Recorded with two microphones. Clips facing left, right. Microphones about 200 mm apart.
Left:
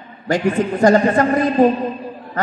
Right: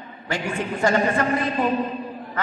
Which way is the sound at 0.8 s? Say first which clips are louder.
Left 7 dB; 40° left (ahead or behind).